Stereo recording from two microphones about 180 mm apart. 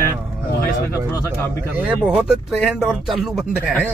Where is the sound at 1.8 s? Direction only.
5° right (ahead or behind).